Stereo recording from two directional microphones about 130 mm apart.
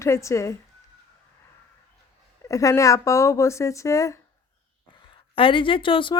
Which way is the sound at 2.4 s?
25° left (ahead or behind).